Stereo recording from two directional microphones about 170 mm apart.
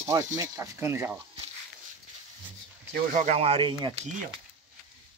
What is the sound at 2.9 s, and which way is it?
Speech, 50° right (ahead or behind).